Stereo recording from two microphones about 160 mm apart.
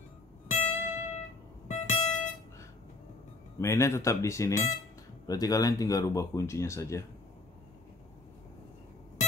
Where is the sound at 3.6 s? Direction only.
15° left (ahead or behind).